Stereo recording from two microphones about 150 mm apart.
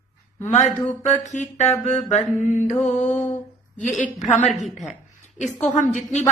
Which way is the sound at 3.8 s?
55° left (ahead or behind).